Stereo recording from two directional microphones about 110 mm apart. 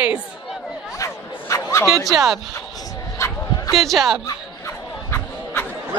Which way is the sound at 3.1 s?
25° left (ahead or behind).